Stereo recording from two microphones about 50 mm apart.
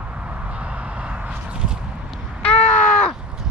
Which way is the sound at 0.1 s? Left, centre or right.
Right.